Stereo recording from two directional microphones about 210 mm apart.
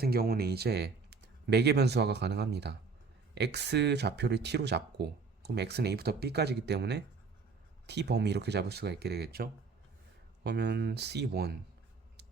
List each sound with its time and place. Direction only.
0.0 s speech: 45° right (ahead or behind)